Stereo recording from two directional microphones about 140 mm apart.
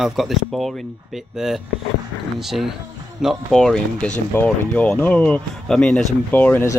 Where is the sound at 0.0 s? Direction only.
Centre (ahead or behind).